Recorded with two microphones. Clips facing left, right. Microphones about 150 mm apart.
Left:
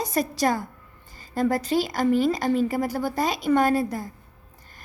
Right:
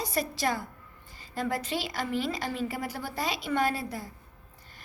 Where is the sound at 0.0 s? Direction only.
45° left (ahead or behind).